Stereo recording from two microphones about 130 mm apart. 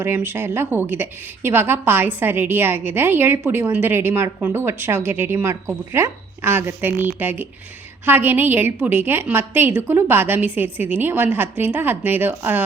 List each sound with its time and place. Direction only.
0.0 s a woman's voice: 15° right (ahead or behind)